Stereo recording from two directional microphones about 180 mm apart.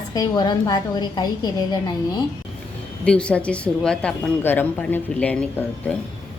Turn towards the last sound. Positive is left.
turn(degrees=5)  # may be behind; listen again after turning